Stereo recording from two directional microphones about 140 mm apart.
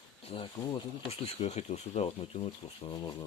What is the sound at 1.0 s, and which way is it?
Speech, 45° left (ahead or behind).